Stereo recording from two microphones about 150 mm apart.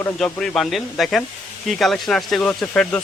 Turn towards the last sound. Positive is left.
turn(degrees=5)  # may be behind; listen again after turning